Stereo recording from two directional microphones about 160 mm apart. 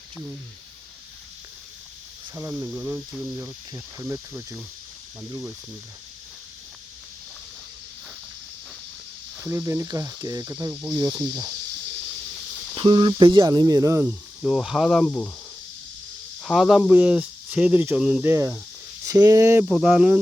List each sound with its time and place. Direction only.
2.3 s speech: 15° right (ahead or behind)
9.4 s speech: 15° right (ahead or behind)
10.9 s speech: 25° right (ahead or behind)
12.7 s speech: 30° right (ahead or behind); by 14.2 s 15° right (ahead or behind)
14.4 s speech: 5° right (ahead or behind)
16.4 s speech: centre (ahead or behind); by 19.6 s 15° right (ahead or behind)
19.6 s speech: 5° right (ahead or behind)